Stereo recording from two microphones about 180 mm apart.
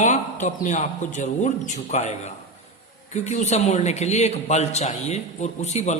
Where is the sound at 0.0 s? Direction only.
40° left (ahead or behind).